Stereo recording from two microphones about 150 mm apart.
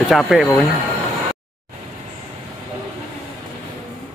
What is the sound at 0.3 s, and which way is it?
Speech, centre (ahead or behind).